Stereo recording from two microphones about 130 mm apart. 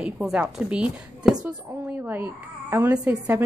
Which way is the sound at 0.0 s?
5° right (ahead or behind).